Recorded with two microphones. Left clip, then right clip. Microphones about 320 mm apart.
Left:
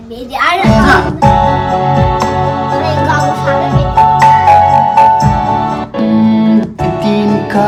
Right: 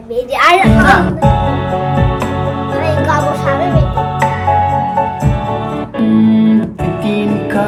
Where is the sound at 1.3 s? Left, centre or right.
Left.